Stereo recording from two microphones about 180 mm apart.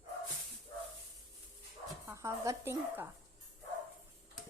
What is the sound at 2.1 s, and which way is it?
A woman's voice, 15° right (ahead or behind).